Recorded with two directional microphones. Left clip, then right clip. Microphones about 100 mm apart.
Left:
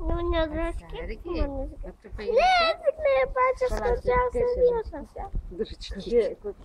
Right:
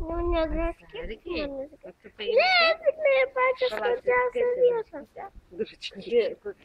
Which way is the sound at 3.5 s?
50° left (ahead or behind).